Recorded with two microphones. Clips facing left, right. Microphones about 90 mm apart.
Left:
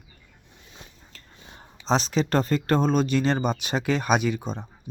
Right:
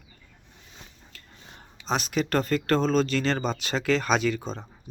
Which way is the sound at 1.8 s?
30° left (ahead or behind).